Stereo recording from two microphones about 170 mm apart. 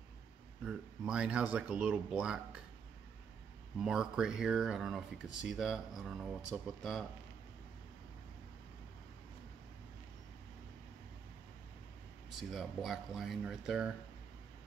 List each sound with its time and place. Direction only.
0.7 s speech: 5° right (ahead or behind)
3.8 s speech: 5° right (ahead or behind)
12.4 s speech: centre (ahead or behind)